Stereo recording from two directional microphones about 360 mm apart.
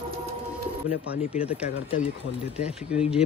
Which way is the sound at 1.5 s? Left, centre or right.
Centre.